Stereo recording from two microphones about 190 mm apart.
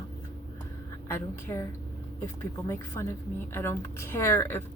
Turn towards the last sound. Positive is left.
turn(degrees=15)  # may be behind; listen again after turning